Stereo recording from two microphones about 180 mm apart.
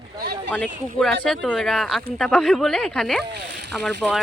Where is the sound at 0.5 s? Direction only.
5° left (ahead or behind).